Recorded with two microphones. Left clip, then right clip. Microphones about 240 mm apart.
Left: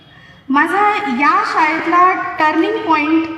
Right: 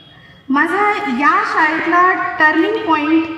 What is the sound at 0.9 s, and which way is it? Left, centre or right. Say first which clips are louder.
Speech: left 1 dB; centre.